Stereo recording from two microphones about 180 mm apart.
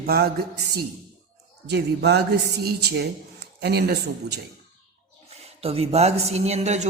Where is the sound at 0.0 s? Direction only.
60° right (ahead or behind).